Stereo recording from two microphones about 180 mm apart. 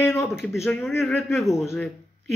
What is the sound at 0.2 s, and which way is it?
Speech, 15° left (ahead or behind).